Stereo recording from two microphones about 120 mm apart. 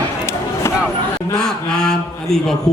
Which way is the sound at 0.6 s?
20° left (ahead or behind).